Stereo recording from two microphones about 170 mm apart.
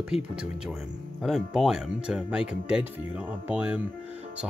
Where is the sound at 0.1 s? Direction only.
Centre (ahead or behind).